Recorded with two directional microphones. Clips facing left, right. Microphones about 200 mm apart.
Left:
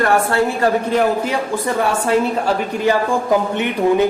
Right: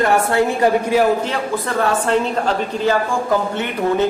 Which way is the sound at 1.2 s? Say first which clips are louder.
Left 2 dB; 15° left (ahead or behind).